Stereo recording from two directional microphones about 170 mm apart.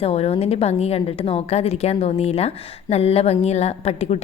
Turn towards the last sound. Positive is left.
turn(degrees=40)  # may be behind; listen again after turning